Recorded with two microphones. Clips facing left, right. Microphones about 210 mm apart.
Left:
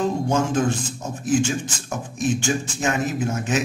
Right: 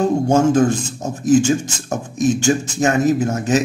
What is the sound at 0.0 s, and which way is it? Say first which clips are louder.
A man's voice: right 7 dB; 40° right (ahead or behind).